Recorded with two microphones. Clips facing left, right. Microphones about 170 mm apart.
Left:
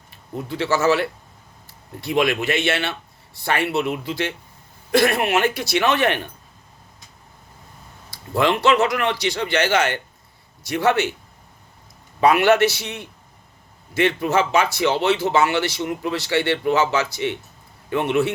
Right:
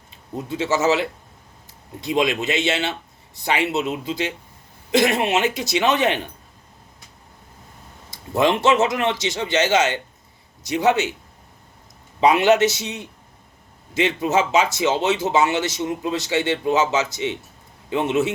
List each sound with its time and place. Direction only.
0.1 s speech: 20° right (ahead or behind)
1.6 s a sound: 20° right (ahead or behind)
2.4 s speech: 20° right (ahead or behind)
8.1 s speech: 20° right (ahead or behind)
12.2 s speech: 20° right (ahead or behind)